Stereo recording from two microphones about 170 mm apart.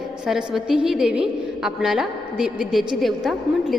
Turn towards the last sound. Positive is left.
turn(degrees=0)  # may be behind; listen again after turning